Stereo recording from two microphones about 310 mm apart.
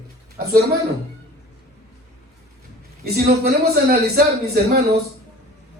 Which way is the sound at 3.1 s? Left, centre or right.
Right.